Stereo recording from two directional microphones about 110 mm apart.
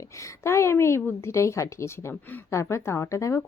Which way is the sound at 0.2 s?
25° left (ahead or behind).